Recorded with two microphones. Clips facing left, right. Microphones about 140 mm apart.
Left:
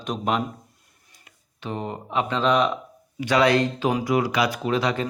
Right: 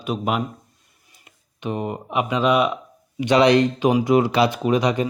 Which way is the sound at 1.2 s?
15° right (ahead or behind).